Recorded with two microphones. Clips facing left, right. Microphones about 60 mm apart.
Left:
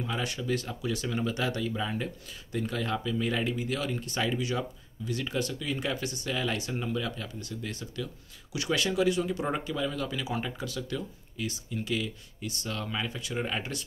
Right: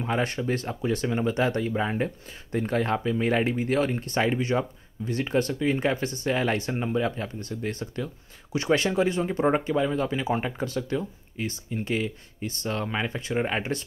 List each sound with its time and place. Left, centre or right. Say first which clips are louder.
0.0 s speech: right 6 dB; right